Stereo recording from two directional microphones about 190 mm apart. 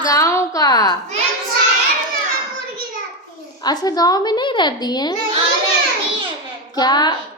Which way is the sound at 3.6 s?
20° left (ahead or behind).